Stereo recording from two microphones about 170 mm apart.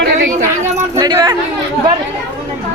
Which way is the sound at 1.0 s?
25° right (ahead or behind).